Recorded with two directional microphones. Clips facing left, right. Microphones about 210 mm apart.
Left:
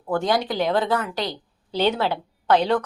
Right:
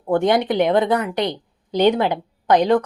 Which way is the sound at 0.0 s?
20° right (ahead or behind).